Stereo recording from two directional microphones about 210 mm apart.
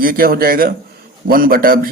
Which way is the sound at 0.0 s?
45° right (ahead or behind).